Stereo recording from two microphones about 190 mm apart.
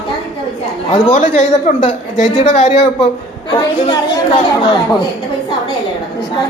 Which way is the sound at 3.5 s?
25° left (ahead or behind).